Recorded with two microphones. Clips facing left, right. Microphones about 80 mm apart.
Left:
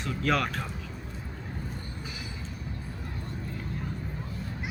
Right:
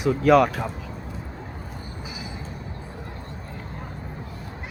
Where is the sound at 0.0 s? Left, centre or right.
Centre.